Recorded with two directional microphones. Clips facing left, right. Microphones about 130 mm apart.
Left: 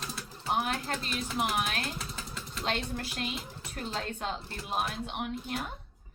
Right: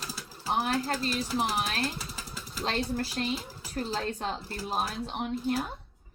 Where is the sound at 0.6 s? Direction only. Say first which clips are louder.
Right 4 dB; 35° right (ahead or behind).